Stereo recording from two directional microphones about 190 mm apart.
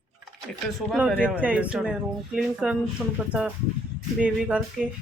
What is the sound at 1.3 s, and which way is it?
A man's voice, 5° right (ahead or behind).